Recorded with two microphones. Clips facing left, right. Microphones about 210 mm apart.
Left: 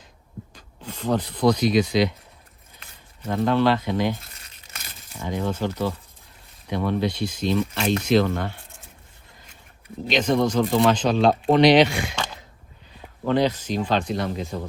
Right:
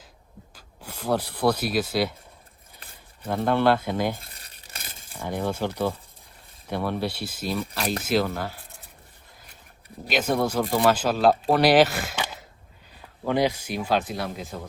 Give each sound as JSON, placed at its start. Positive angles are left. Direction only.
{"t": 0.5, "sound": "speech", "side_deg": -10}
{"t": 3.2, "sound": "speech", "side_deg": -10}
{"t": 4.2, "sound": "a sound", "side_deg": -30}
{"t": 5.4, "sound": "speech", "side_deg": -10}
{"t": 10.1, "sound": "speech", "side_deg": -5}